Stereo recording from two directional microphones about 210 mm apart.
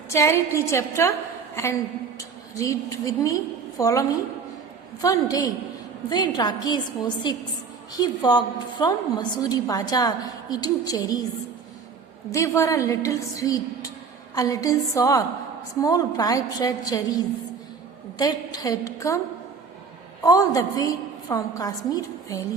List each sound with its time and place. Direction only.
0.1 s a woman's voice: 15° left (ahead or behind)
2.1 s a woman's voice: 15° left (ahead or behind)
12.3 s a woman's voice: 15° left (ahead or behind)
20.2 s a woman's voice: 15° left (ahead or behind)